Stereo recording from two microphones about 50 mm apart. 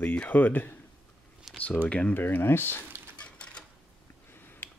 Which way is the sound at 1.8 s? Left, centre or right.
Left.